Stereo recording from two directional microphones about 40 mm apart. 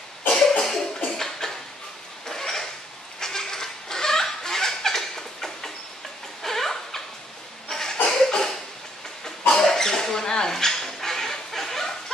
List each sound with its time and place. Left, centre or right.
0.3 s cough: centre
2.2 s a sound: centre
7.6 s cough: centre
9.5 s dog: centre